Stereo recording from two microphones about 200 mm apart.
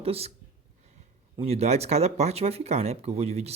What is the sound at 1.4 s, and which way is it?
Speech, 30° right (ahead or behind).